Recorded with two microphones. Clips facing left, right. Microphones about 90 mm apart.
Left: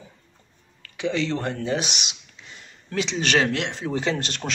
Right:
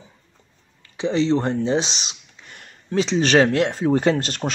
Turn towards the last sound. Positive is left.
turn(degrees=-40)  # may be behind; listen again after turning